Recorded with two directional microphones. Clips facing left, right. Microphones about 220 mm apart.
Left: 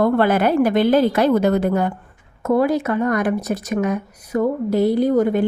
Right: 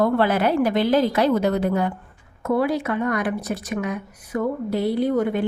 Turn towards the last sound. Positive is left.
turn(degrees=40)  # may be behind; listen again after turning